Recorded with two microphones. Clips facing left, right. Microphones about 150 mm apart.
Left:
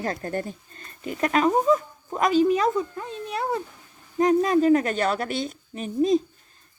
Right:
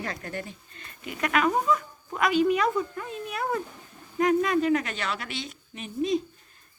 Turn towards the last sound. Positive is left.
turn(degrees=40)  # may be behind; listen again after turning